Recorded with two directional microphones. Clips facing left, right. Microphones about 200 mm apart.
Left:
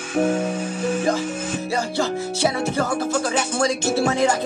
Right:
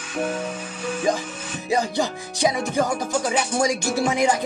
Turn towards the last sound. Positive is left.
turn(degrees=-15)  # may be behind; listen again after turning